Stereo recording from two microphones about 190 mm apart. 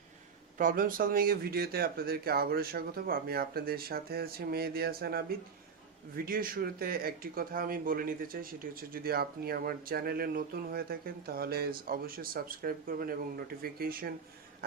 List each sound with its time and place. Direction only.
0.6 s speech: 45° right (ahead or behind)